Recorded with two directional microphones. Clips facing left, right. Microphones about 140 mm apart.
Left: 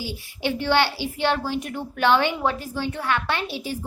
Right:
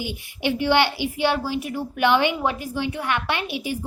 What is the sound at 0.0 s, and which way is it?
Speech, 15° right (ahead or behind).